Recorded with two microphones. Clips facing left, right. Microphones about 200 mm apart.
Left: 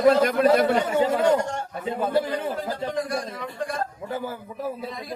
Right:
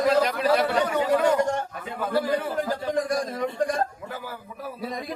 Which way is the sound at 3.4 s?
40° right (ahead or behind).